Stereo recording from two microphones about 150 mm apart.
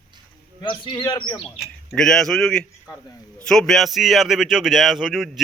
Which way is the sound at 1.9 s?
5° left (ahead or behind).